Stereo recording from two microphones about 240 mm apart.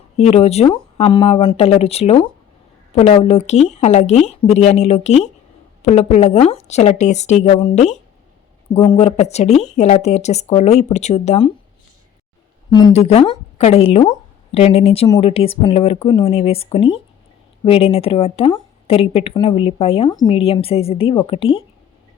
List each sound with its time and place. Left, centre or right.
0.2 s speech: left
12.7 s speech: left